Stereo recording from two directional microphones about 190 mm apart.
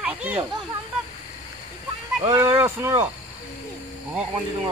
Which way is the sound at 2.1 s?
20° right (ahead or behind).